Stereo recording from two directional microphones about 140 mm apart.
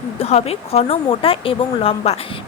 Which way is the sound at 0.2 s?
45° left (ahead or behind).